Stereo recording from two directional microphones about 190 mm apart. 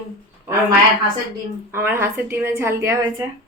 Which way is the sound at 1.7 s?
10° right (ahead or behind).